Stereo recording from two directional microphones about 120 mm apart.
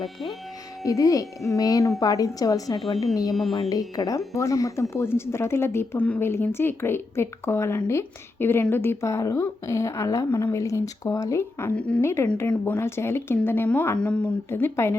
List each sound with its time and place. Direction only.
0.0 s speech: centre (ahead or behind)
0.9 s speech: 30° left (ahead or behind)
11.8 s speech: 10° left (ahead or behind)